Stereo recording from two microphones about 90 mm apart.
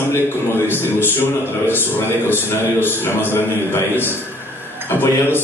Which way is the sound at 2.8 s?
25° left (ahead or behind).